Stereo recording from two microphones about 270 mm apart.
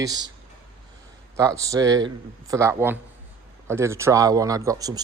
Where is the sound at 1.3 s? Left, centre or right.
Centre.